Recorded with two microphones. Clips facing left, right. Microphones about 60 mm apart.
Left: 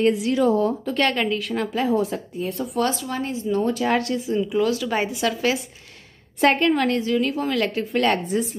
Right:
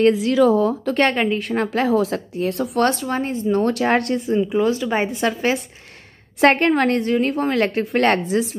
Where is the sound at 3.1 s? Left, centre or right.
Right.